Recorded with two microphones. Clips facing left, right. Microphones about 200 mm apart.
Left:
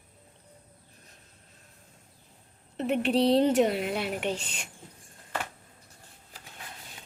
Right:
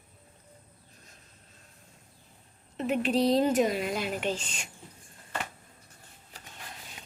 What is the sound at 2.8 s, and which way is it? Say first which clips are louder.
A woman's voice: left 1 dB; 65° left (ahead or behind).